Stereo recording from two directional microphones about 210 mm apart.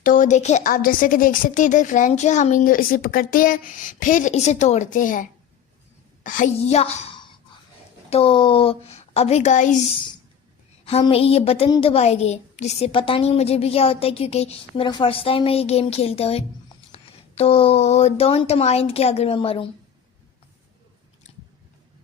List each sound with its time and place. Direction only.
0.0 s a woman's voice: 40° left (ahead or behind)
10.8 s speech: 30° left (ahead or behind)